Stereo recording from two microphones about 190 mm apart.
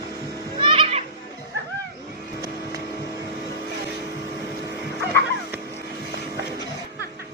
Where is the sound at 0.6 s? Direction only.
30° right (ahead or behind).